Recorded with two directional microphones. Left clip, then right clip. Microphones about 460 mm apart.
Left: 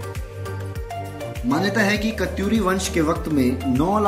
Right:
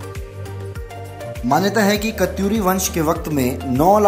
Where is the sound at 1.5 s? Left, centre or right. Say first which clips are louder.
Right 4 dB; centre.